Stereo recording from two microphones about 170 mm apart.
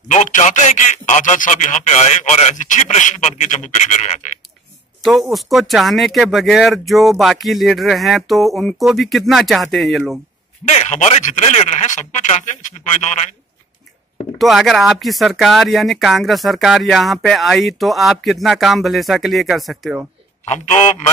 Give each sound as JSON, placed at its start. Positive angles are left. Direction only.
{"t": 0.1, "sound": "a man's voice", "side_deg": 45}
{"t": 5.0, "sound": "speech", "side_deg": 0}
{"t": 10.7, "sound": "a man's voice", "side_deg": 45}
{"t": 14.4, "sound": "speech", "side_deg": 0}
{"t": 20.4, "sound": "a man's voice", "side_deg": 40}